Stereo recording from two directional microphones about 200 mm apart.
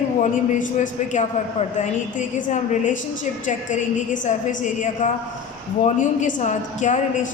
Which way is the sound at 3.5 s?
35° left (ahead or behind).